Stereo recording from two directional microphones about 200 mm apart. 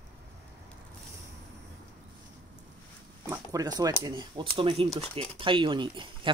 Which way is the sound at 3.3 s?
20° right (ahead or behind).